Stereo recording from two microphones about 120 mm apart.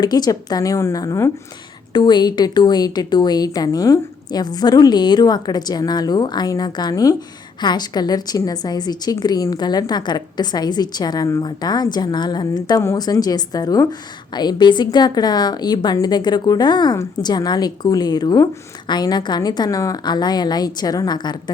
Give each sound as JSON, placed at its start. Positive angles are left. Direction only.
{"t": 0.0, "sound": "a woman's voice", "side_deg": 35}
{"t": 1.9, "sound": "a woman's voice", "side_deg": 40}